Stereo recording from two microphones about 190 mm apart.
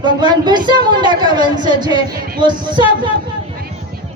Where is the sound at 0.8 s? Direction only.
25° right (ahead or behind).